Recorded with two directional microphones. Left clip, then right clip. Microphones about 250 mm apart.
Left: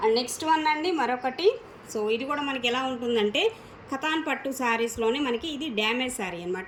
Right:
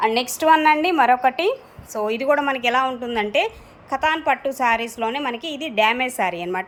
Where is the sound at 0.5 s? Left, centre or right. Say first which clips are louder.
Right 8 dB; centre.